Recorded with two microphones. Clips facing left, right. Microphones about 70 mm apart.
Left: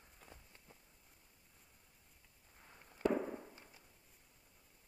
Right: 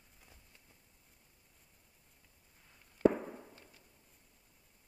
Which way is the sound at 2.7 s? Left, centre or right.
Left.